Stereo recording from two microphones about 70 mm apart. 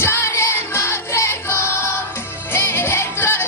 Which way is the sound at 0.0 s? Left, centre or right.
Left.